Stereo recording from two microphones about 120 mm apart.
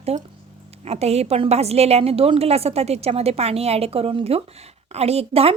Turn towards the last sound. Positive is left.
turn(degrees=-55)  # may be behind; listen again after turning